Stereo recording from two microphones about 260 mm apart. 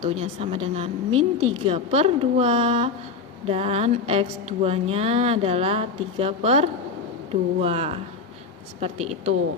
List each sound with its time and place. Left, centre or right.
0.0 s speech: right